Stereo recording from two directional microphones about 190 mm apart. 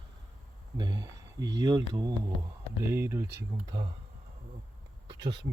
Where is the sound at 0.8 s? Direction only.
20° right (ahead or behind).